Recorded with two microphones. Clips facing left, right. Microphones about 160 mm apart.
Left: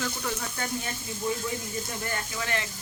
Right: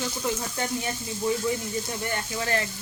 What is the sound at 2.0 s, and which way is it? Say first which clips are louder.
Speech: right 3 dB; 30° right (ahead or behind).